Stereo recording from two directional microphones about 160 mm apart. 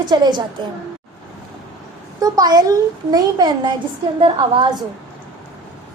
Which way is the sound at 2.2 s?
25° right (ahead or behind).